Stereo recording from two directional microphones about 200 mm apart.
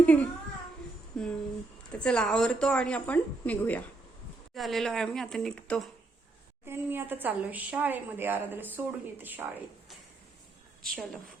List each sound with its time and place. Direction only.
0.0 s a child's voice: 5° left (ahead or behind)
1.9 s speech: 5° left (ahead or behind)
6.7 s a woman's voice: 10° right (ahead or behind)
10.8 s speech: centre (ahead or behind)